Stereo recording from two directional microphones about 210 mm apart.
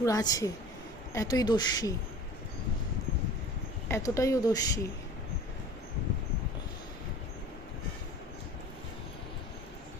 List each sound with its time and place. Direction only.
0.0 s speech: 15° left (ahead or behind)
3.8 s speech: 15° left (ahead or behind)